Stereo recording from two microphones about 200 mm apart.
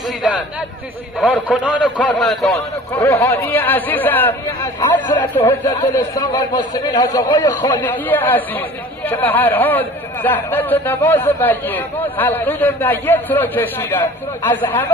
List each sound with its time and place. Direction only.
0.2 s a sound: 5° right (ahead or behind)
1.2 s a man's voice: 5° left (ahead or behind)
2.5 s a man's voice: 15° left (ahead or behind)